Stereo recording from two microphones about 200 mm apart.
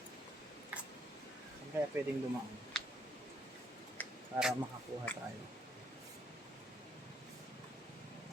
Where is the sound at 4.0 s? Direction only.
10° left (ahead or behind).